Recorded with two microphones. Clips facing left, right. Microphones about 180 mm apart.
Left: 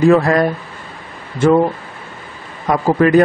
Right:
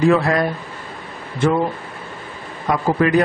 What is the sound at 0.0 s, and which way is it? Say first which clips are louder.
Speech: left 4 dB; 45° left (ahead or behind).